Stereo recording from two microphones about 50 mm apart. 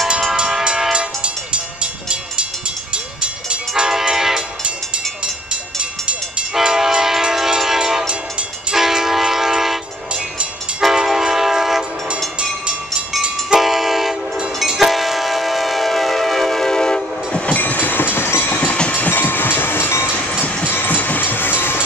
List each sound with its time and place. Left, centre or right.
0.4 s train: centre
1.2 s vehicle: centre
3.2 s train: centre
6.5 s train: centre
8.1 s train: centre
8.7 s train: centre
11.1 s train: centre
13.2 s train: centre
17.5 s train: left
18.8 s train: left
20.3 s train: left